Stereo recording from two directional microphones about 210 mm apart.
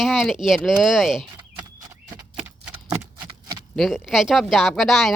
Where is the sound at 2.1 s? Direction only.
10° right (ahead or behind).